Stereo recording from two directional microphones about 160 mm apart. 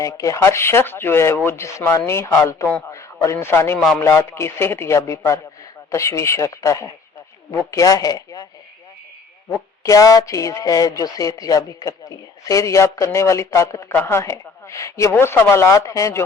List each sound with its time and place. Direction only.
0.0 s speech: 20° left (ahead or behind)
9.8 s speech: 20° left (ahead or behind)